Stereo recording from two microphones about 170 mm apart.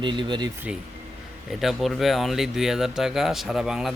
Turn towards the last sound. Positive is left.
turn(degrees=-5)  # may be behind; listen again after turning